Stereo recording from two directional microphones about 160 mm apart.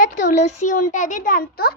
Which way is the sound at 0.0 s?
55° left (ahead or behind).